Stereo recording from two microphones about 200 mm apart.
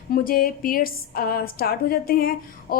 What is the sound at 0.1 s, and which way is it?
A woman's voice, 45° left (ahead or behind).